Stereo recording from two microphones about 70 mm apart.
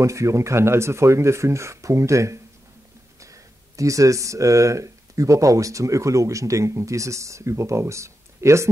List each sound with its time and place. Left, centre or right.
0.0 s speech: right